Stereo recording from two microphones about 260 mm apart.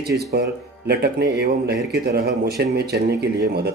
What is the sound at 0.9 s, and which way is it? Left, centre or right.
Speech, right.